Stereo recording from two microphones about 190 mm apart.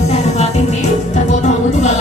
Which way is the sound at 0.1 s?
35° left (ahead or behind).